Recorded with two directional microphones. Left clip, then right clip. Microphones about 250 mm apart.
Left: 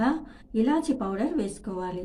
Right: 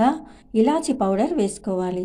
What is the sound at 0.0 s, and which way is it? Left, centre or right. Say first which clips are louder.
A woman's voice: right 7 dB; right.